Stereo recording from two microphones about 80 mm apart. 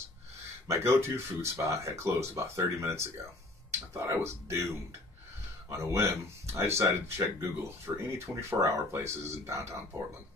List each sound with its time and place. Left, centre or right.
0.7 s speech: right